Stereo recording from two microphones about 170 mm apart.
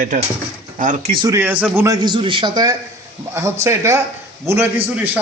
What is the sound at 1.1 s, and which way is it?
Speech, 25° right (ahead or behind).